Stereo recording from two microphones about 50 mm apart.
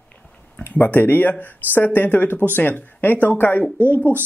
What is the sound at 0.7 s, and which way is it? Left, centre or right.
Speech, left.